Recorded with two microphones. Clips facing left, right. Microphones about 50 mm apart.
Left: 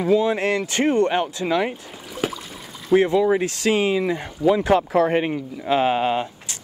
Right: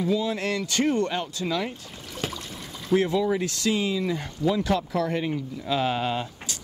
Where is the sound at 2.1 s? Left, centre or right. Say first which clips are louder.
Left 6 dB; centre.